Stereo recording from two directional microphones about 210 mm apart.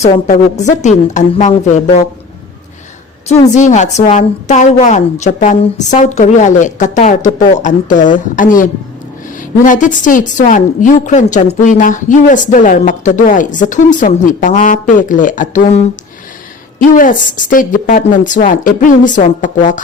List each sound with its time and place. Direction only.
0.0 s a woman's voice: 35° left (ahead or behind)
3.2 s a woman's voice: 35° left (ahead or behind)
9.6 s a woman's voice: 40° left (ahead or behind)